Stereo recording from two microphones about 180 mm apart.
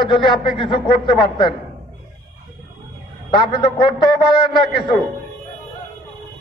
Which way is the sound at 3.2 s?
25° left (ahead or behind).